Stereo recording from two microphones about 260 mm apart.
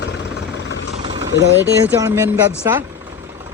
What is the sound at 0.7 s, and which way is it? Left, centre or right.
Vehicle, left.